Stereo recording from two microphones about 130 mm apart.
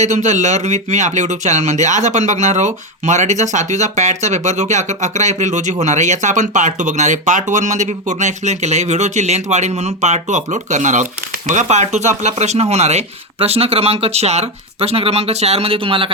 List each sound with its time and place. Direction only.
0.0 s speech: 65° right (ahead or behind); by 16.1 s 45° right (ahead or behind)